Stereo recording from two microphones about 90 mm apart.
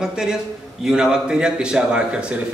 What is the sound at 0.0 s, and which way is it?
A man's voice, 5° right (ahead or behind).